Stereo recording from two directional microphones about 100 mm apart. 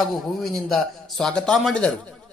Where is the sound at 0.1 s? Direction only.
5° left (ahead or behind).